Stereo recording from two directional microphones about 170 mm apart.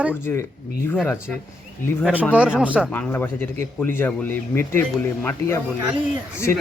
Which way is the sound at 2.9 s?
10° left (ahead or behind).